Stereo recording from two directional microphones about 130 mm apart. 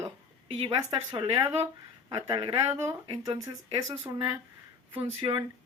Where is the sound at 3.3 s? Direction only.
30° right (ahead or behind).